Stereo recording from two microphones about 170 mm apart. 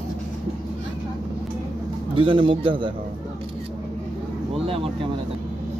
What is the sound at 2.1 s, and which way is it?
Speech, 30° right (ahead or behind).